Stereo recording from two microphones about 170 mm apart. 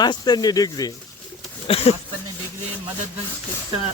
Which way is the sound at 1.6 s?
35° left (ahead or behind).